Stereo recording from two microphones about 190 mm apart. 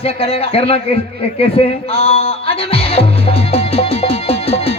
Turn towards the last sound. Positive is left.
turn(degrees=30)  # may be behind; listen again after turning